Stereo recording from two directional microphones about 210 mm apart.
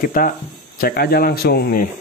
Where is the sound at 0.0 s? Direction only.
40° left (ahead or behind).